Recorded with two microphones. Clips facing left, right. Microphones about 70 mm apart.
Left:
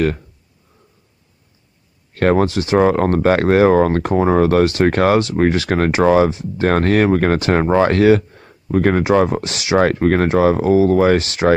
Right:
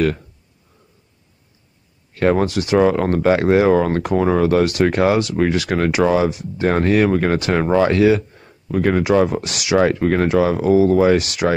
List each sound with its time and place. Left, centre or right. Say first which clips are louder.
2.1 s speech: left 2 dB; left
2.4 s speech: left 1 dB; left
7.3 s speech: left 2 dB; left
7.8 s speech: left 2 dB; left
9.0 s speech: left 1 dB; left
9.8 s speech: left 1 dB; left